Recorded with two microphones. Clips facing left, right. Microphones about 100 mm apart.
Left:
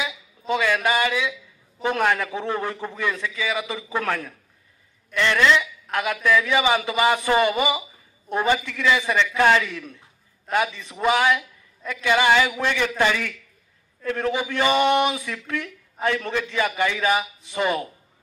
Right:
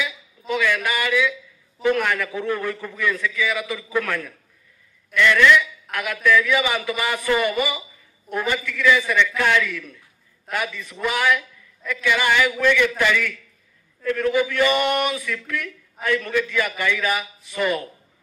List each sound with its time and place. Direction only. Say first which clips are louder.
0.0 s a sound: even; 25° left (ahead or behind)
0.8 s a man's voice: even; 25° left (ahead or behind)
12.5 s a man's voice: right 3 dB; 35° left (ahead or behind)